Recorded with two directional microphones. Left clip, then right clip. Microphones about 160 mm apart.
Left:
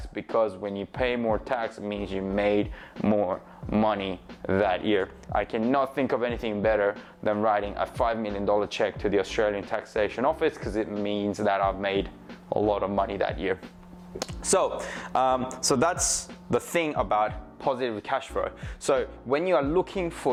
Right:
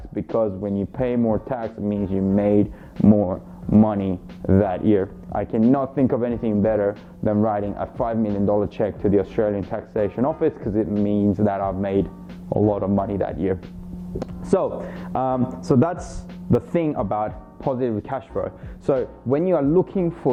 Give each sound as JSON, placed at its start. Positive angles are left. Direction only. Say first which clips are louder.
{"t": 0.2, "sound": "speech", "louder": "right 3 dB", "side_deg": 10}
{"t": 12.5, "sound": "speech", "louder": "right 4 dB", "side_deg": 50}
{"t": 12.7, "sound": "speech", "louder": "right 3 dB", "side_deg": 15}